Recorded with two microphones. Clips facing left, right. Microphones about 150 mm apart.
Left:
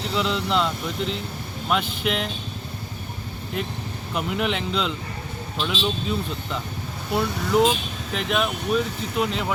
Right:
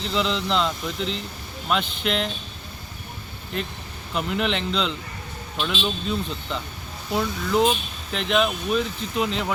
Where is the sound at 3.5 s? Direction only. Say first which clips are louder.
Left 1 dB; 5° left (ahead or behind).